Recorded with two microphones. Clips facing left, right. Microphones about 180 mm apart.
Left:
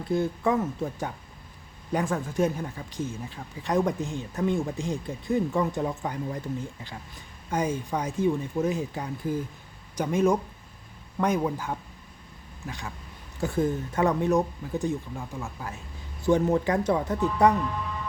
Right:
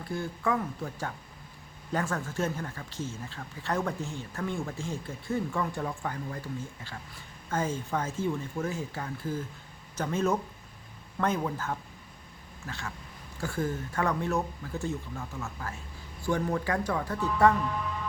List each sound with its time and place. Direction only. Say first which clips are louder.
0.1 s speech: left 6 dB; 20° left (ahead or behind)
7.5 s speech: left 3 dB; 15° left (ahead or behind)